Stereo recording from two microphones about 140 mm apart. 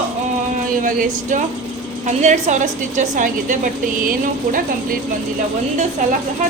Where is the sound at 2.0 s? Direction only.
60° right (ahead or behind); by 4.6 s 85° right.